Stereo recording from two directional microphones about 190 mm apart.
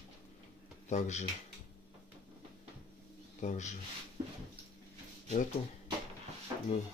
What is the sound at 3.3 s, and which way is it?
Speech, 40° left (ahead or behind).